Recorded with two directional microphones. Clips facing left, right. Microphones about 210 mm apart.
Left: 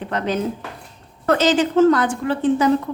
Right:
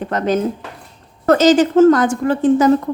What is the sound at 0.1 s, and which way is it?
A woman's voice, 45° right (ahead or behind).